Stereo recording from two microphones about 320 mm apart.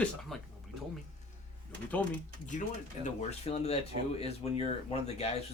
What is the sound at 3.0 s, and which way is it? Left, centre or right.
Speech, centre.